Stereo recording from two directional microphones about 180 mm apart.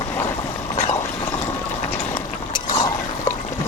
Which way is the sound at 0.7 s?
35° left (ahead or behind).